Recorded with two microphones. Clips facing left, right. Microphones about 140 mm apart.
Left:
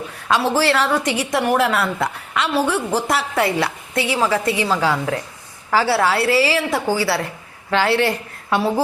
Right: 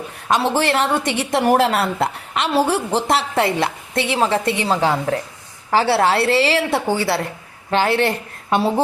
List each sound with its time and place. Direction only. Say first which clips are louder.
0.3 s a woman's voice: even; 20° right (ahead or behind)